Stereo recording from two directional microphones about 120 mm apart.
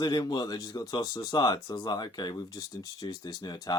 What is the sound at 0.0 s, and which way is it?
Speech, 35° left (ahead or behind).